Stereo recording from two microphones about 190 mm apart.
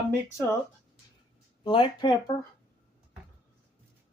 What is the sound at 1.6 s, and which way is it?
Speech, 25° left (ahead or behind).